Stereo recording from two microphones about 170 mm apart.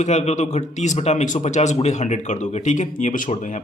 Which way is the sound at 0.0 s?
40° left (ahead or behind).